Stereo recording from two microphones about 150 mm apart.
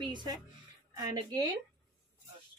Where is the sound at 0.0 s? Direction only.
30° right (ahead or behind).